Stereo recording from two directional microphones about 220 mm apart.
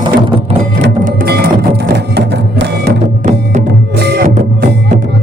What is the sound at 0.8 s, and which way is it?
Music, 45° right (ahead or behind).